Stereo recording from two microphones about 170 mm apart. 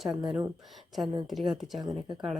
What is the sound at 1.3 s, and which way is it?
Speech, centre (ahead or behind).